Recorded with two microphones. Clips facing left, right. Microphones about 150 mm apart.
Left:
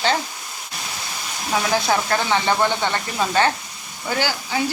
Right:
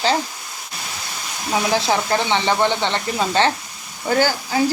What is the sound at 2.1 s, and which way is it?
Speech, 25° right (ahead or behind).